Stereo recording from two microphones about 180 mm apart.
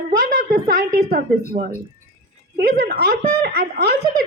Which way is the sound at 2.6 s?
60° right (ahead or behind).